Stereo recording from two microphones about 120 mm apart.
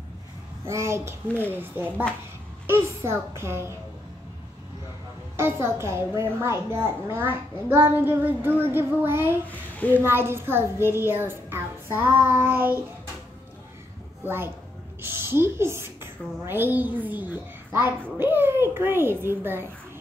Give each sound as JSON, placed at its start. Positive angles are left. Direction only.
{"t": 0.7, "sound": "a child's voice", "side_deg": -25}
{"t": 5.4, "sound": "a child's voice", "side_deg": -20}
{"t": 9.5, "sound": "a child's voice", "side_deg": 15}
{"t": 10.0, "sound": "a child's voice", "side_deg": -20}
{"t": 14.2, "sound": "a child's voice", "side_deg": -20}